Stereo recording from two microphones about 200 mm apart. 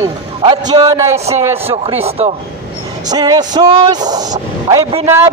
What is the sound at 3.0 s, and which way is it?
A man's voice, 20° right (ahead or behind).